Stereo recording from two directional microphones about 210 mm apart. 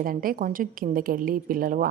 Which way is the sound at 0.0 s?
40° right (ahead or behind).